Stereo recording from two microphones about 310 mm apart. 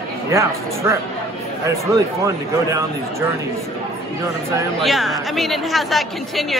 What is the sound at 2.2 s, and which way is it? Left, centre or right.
Speech, centre.